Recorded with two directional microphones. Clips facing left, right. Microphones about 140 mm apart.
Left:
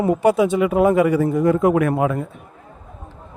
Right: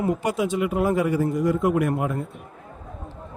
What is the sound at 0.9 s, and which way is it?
A man's voice, 75° left (ahead or behind).